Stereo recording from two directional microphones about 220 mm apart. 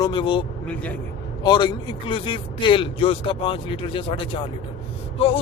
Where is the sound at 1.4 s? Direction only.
20° left (ahead or behind).